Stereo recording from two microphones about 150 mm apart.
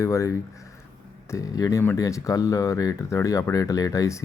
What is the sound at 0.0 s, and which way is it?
Speech, 20° left (ahead or behind).